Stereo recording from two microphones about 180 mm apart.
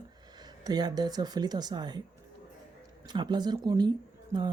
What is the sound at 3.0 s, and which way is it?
Speech, 25° right (ahead or behind).